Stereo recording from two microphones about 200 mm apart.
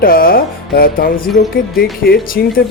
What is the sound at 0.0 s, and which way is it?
Speech, 45° left (ahead or behind).